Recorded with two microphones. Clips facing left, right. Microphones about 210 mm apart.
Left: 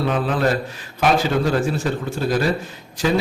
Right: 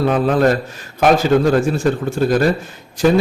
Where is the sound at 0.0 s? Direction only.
45° right (ahead or behind).